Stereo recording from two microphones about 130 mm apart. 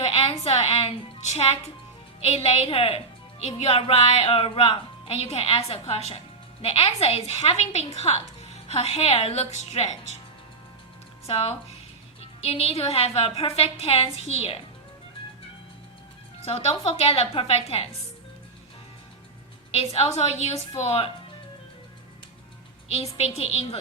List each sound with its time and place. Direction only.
0.1 s music: 50° left (ahead or behind)
2.2 s a woman's voice: 50° left (ahead or behind)
11.3 s a woman's voice: 45° left (ahead or behind)
16.5 s a woman's voice: 55° left (ahead or behind)
19.7 s a woman's voice: 50° left (ahead or behind)
22.9 s a woman's voice: 50° left (ahead or behind)